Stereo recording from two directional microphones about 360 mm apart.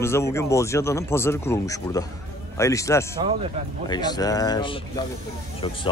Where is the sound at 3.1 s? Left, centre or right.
Centre.